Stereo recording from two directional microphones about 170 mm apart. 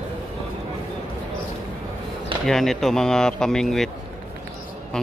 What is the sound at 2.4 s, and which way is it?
Speech, centre (ahead or behind).